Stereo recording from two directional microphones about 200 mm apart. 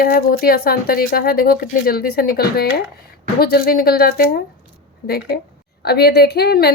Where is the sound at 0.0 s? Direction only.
50° left (ahead or behind).